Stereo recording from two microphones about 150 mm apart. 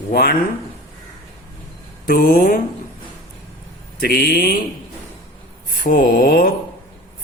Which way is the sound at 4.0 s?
90° left.